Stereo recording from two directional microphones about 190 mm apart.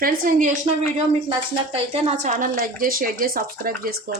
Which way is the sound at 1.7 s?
30° right (ahead or behind).